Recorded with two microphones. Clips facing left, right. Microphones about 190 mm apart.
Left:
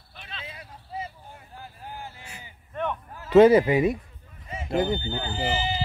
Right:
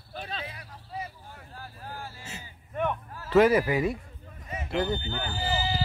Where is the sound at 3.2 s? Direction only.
20° left (ahead or behind).